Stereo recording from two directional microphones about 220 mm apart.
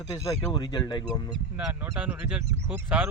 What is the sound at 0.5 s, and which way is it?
Speech, 20° left (ahead or behind).